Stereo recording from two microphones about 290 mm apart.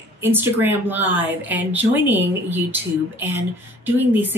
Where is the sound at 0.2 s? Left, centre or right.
Centre.